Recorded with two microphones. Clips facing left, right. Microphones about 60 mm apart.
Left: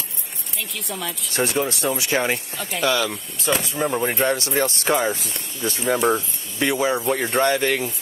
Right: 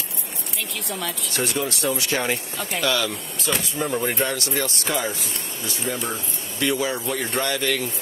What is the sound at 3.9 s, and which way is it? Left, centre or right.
Speech, centre.